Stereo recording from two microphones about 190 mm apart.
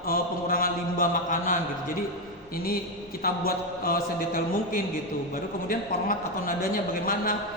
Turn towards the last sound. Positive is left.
turn(degrees=50)  # may be behind; listen again after turning